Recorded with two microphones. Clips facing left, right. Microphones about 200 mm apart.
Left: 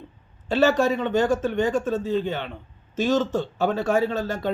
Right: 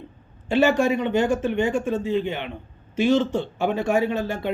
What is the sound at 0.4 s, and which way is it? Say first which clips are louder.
Speech: right 1 dB; 15° right (ahead or behind).